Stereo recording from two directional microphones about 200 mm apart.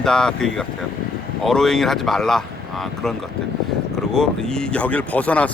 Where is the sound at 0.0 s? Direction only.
5° left (ahead or behind).